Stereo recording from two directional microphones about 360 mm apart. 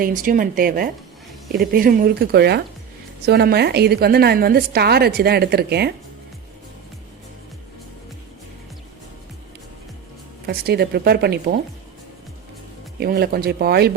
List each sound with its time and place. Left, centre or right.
0.0 s a woman's voice: right
10.4 s a woman's voice: right
13.0 s a woman's voice: right